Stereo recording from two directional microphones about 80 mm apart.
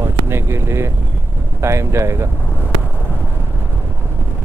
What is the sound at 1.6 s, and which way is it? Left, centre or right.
Speech, right.